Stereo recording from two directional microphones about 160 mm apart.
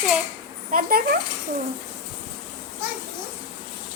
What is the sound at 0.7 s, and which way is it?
Speech, 65° right (ahead or behind).